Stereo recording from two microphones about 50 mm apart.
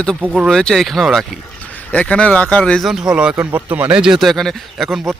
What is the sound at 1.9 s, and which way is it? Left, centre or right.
Speech, left.